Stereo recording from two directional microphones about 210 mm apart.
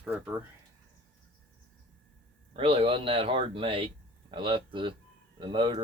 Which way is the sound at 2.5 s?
25° right (ahead or behind).